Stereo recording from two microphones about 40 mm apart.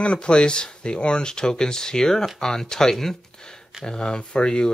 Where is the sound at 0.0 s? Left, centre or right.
Left.